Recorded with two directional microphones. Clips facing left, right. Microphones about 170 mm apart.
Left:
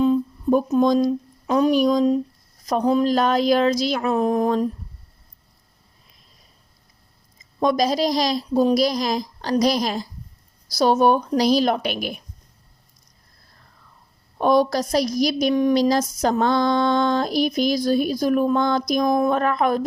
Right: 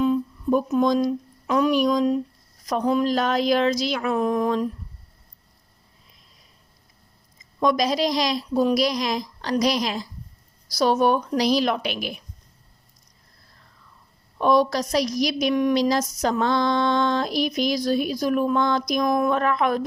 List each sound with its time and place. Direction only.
0.0 s speech: 35° left (ahead or behind)
7.6 s speech: 35° left (ahead or behind)
10.7 s speech: 25° left (ahead or behind); by 12.2 s 50° left (ahead or behind)
14.3 s a woman's voice: 45° left (ahead or behind)
15.5 s speech: 40° left (ahead or behind)